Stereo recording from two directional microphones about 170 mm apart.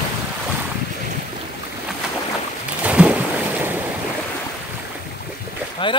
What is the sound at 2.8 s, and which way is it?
Boat, 5° right (ahead or behind).